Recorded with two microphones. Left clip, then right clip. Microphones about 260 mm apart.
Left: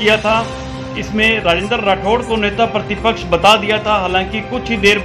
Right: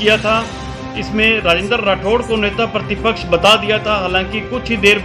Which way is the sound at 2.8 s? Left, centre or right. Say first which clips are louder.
Left 1 dB; right.